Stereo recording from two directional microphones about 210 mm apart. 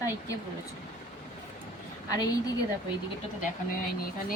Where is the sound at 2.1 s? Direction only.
15° left (ahead or behind).